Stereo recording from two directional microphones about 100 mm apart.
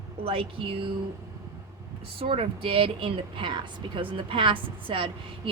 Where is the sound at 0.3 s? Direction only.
65° right (ahead or behind).